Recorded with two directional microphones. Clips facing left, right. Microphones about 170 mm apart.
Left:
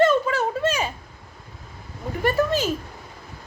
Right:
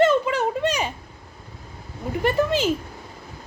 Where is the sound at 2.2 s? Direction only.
15° right (ahead or behind).